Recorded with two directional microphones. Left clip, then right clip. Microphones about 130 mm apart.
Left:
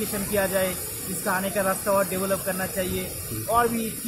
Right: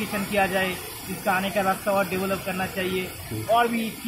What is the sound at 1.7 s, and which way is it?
Speech, 25° left (ahead or behind).